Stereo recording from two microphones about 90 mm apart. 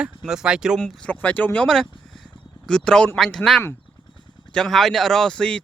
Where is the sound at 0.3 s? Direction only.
10° right (ahead or behind).